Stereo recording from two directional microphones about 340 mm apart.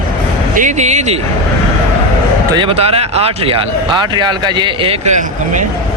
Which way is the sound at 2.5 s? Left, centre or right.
Centre.